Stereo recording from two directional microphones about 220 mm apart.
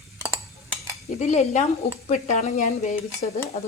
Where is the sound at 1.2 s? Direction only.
30° left (ahead or behind).